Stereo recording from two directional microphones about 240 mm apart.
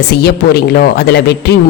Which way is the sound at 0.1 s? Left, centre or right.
Left.